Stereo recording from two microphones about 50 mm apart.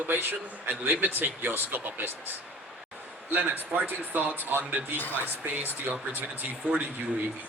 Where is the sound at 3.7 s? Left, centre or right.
Right.